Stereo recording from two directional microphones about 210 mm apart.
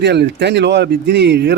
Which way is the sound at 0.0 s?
55° right (ahead or behind).